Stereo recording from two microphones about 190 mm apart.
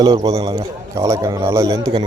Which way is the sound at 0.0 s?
20° right (ahead or behind).